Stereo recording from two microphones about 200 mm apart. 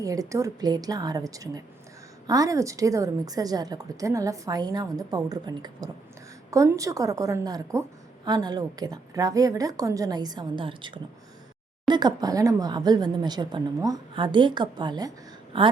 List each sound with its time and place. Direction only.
0.0 s a woman's voice: 15° right (ahead or behind)